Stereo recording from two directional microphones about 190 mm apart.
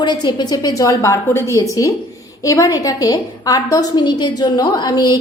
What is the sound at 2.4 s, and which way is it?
A woman's voice, 15° left (ahead or behind).